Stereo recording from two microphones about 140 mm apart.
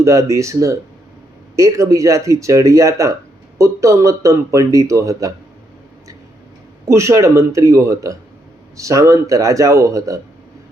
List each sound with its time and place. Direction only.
0.0 s speech: 20° right (ahead or behind)
6.8 s speech: 20° right (ahead or behind)